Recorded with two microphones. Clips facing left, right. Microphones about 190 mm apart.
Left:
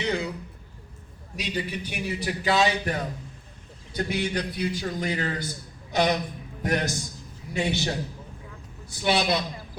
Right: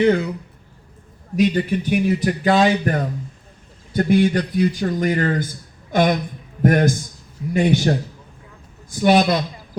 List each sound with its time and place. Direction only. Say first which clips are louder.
0.0 s a man's voice: right 11 dB; 50° right (ahead or behind)
1.4 s a man's voice: right 13 dB; 50° right (ahead or behind)